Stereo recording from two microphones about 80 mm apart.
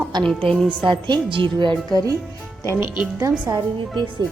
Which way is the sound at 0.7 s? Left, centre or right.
Right.